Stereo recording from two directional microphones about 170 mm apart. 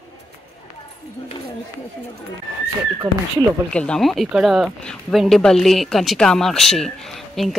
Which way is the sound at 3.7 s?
5° left (ahead or behind).